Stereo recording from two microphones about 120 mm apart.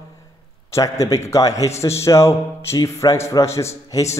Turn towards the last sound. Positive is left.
turn(degrees=30)  # may be behind; listen again after turning